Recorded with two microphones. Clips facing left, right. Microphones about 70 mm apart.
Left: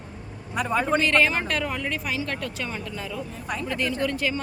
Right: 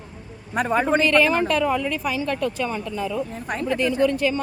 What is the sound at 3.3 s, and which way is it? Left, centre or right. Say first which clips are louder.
Speech: right 3 dB; right.